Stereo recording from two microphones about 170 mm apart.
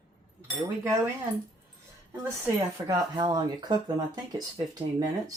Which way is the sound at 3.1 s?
25° right (ahead or behind).